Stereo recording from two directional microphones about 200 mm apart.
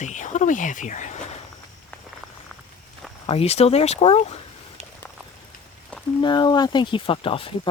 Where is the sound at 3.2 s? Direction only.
30° left (ahead or behind).